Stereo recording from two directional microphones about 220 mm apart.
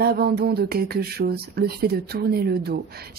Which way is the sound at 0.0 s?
45° right (ahead or behind).